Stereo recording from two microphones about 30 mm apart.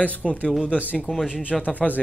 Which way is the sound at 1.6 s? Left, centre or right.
Left.